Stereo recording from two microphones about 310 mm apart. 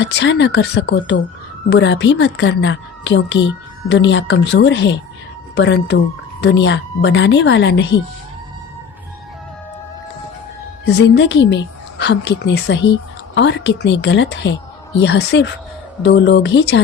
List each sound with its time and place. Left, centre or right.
0.0 s a woman's voice: left
10.8 s a woman's voice: left